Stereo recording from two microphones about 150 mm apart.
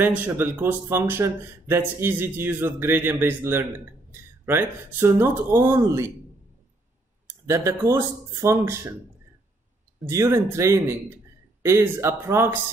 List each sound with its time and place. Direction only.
0.0 s speech: 15° right (ahead or behind)
7.2 s speech: 15° right (ahead or behind)
10.0 s speech: 20° right (ahead or behind)